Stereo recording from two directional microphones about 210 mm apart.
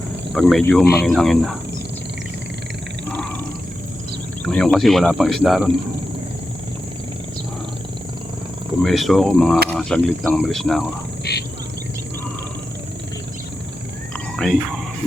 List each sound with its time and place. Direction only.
0.3 s speech: centre (ahead or behind)
4.4 s speech: centre (ahead or behind)
8.8 s speech: centre (ahead or behind)
11.3 s speech: 50° left (ahead or behind)
14.3 s speech: centre (ahead or behind)